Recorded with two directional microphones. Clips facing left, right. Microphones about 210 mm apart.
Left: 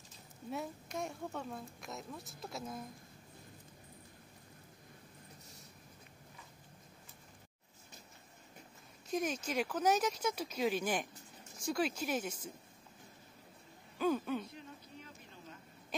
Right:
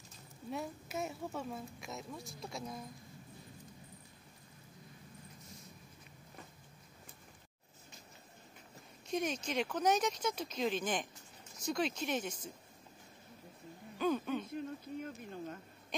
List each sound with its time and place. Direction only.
0.5 s a woman's voice: centre (ahead or behind)
9.1 s speech: 5° left (ahead or behind)
13.9 s a sound: 5° left (ahead or behind)
14.5 s speech: 50° right (ahead or behind)